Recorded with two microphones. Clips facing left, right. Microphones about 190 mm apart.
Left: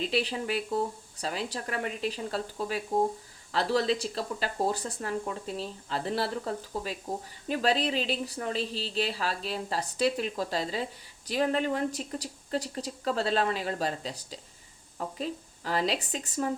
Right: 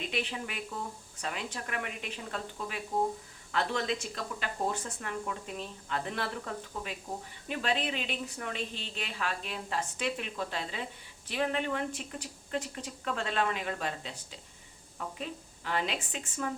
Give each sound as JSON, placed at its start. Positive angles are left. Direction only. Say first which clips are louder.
{"t": 0.0, "sound": "a woman's voice", "louder": "left 6 dB", "side_deg": 35}